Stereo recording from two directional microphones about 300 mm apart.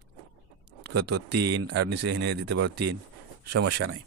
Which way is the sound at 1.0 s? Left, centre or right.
Right.